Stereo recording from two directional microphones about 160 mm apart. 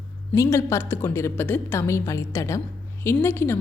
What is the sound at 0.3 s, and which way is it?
A woman's voice, 15° left (ahead or behind).